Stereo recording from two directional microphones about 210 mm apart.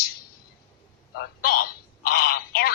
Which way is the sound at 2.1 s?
45° left (ahead or behind).